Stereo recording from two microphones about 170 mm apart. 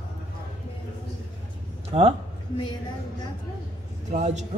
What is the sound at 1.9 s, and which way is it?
Speech, 35° right (ahead or behind).